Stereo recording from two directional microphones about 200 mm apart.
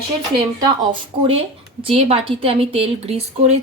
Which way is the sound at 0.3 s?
20° right (ahead or behind).